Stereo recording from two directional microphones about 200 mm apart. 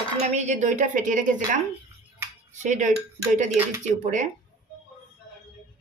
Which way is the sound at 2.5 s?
40° right (ahead or behind).